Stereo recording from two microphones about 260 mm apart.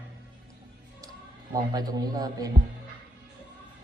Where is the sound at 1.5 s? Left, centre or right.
Centre.